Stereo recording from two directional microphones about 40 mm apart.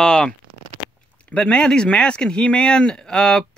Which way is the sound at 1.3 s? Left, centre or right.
Left.